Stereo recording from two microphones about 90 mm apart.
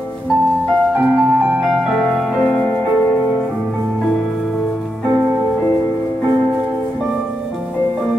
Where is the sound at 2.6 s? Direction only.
15° left (ahead or behind).